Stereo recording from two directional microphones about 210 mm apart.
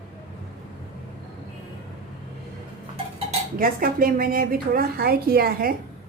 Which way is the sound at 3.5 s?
45° right (ahead or behind).